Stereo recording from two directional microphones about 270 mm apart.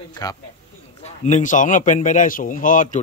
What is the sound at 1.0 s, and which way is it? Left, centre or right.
Speech, left.